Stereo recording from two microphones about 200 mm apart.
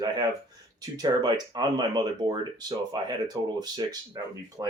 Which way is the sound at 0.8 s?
20° right (ahead or behind).